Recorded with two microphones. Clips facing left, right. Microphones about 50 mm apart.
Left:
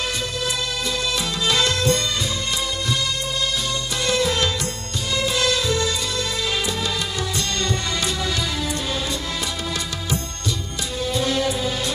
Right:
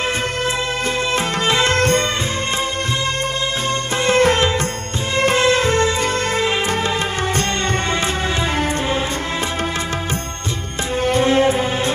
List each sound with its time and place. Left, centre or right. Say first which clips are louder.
1.1 s music: right 4 dB; right
1.8 s music of bollywood: right 5 dB; right
4.0 s music: right 7 dB; right
11.0 s music: right 7 dB; right